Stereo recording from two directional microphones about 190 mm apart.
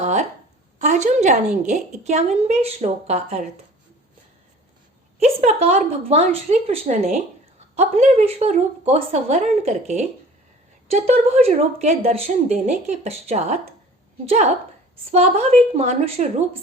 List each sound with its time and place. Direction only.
0.0 s a sound: 35° right (ahead or behind)
0.8 s a woman's voice: 40° right (ahead or behind)
5.2 s speech: 35° right (ahead or behind)
15.1 s speech: 35° right (ahead or behind)